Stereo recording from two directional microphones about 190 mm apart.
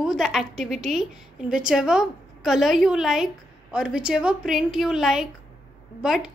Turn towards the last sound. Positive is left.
turn(degrees=-5)  # may be behind; listen again after turning